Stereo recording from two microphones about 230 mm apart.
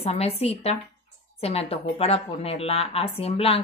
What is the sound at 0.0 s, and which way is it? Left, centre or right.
A woman's voice, left.